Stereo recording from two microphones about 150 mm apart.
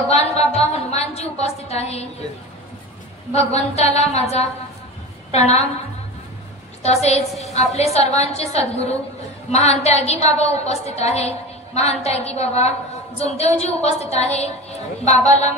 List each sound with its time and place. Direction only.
0.1 s a sound: 45° left (ahead or behind)
1.4 s a woman's voice: 45° left (ahead or behind)
3.3 s a woman's voice: 45° left (ahead or behind)
6.8 s a woman's voice: 45° left (ahead or behind)